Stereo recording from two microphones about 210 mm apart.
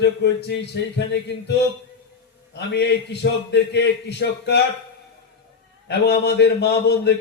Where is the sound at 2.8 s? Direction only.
50° left (ahead or behind).